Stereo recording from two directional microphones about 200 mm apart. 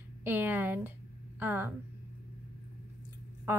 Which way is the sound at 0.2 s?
10° right (ahead or behind).